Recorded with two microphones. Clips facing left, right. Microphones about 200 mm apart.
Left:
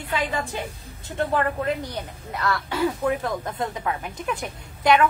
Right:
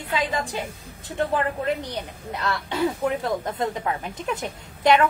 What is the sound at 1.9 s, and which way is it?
Speech, 20° right (ahead or behind).